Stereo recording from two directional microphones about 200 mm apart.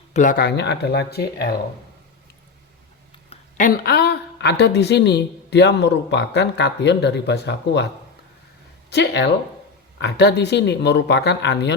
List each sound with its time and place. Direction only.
0.1 s speech: 40° left (ahead or behind)
3.2 s speech: 45° left (ahead or behind)
8.9 s speech: 60° left (ahead or behind)